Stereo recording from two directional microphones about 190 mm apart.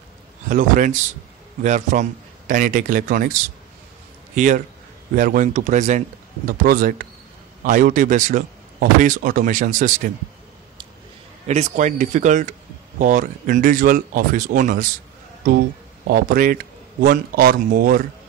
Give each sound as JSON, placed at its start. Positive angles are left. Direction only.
{"t": 0.5, "sound": "a man's voice", "side_deg": -45}
{"t": 5.1, "sound": "a man's voice", "side_deg": -45}
{"t": 11.4, "sound": "a man's voice", "side_deg": -40}
{"t": 16.1, "sound": "a man's voice", "side_deg": -50}